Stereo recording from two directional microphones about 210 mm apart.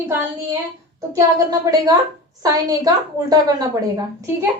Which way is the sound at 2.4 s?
20° right (ahead or behind).